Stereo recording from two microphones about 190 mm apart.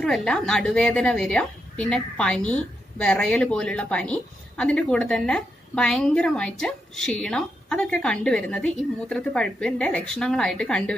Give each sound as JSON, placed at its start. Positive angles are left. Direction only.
{"t": 0.0, "sound": "a woman's voice", "side_deg": 5}